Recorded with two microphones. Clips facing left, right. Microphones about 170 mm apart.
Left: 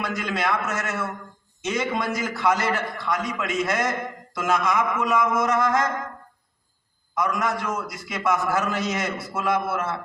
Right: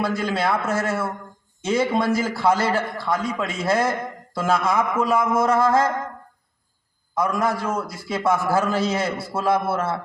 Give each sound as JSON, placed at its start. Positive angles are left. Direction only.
{"t": 0.0, "sound": "a man's voice", "side_deg": -30}
{"t": 7.2, "sound": "a man's voice", "side_deg": -30}